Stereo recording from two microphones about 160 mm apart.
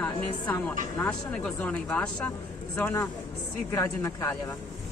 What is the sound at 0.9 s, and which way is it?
Speech, 10° left (ahead or behind).